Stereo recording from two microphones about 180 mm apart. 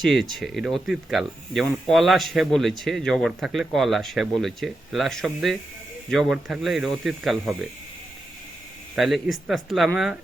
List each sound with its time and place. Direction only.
0.0 s speech: centre (ahead or behind)
9.0 s speech: centre (ahead or behind)